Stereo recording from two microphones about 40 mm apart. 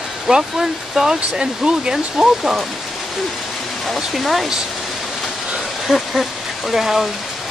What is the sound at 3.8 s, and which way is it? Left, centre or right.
Speech, centre.